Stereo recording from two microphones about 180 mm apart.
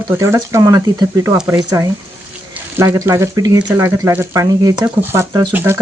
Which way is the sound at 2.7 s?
15° right (ahead or behind).